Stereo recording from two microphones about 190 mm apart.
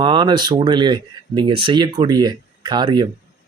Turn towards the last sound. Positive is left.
turn(degrees=-25)  # may be behind; listen again after turning